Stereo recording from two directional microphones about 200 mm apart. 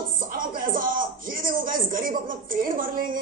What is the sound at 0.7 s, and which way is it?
Speech, 45° right (ahead or behind).